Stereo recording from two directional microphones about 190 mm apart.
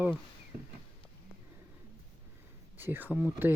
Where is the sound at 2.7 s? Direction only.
10° right (ahead or behind).